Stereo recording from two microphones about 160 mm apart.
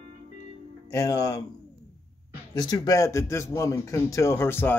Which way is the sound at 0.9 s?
20° left (ahead or behind).